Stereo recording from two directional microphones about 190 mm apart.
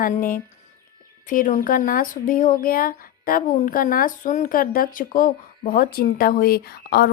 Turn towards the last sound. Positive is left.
turn(degrees=55)  # may be behind; listen again after turning